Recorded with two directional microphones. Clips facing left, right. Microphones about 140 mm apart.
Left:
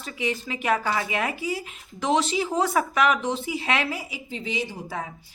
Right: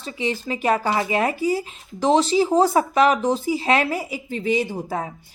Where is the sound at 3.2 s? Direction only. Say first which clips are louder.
Right 6 dB; 40° right (ahead or behind).